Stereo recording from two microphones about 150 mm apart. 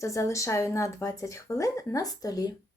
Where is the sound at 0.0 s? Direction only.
20° left (ahead or behind).